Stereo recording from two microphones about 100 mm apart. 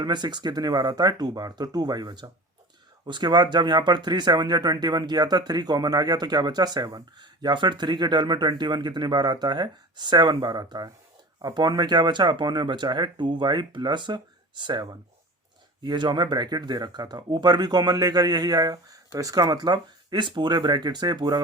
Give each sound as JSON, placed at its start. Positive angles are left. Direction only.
{"t": 0.0, "sound": "speech", "side_deg": -45}